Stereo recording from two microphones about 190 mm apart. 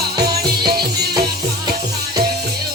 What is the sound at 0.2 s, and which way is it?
Music, 20° right (ahead or behind).